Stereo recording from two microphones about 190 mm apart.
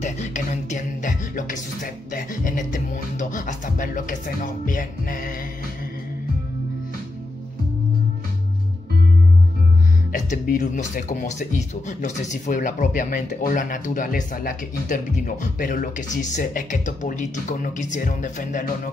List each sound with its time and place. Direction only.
0.0 s music: 40° left (ahead or behind)
10.1 s speech: 45° left (ahead or behind)